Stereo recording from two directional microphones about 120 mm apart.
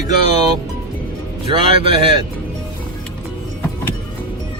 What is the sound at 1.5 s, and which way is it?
Speech, 50° right (ahead or behind).